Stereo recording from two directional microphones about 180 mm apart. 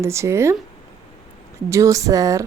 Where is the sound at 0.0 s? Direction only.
15° right (ahead or behind).